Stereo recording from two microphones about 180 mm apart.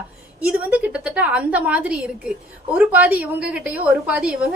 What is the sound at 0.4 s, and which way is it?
A woman's voice, 5° right (ahead or behind).